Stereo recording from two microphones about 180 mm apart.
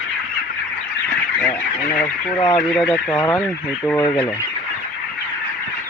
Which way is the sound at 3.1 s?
20° left (ahead or behind).